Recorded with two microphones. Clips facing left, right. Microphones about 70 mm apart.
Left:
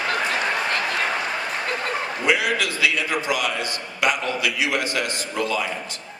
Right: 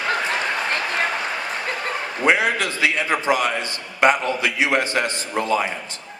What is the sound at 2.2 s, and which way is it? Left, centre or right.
A man's voice, right.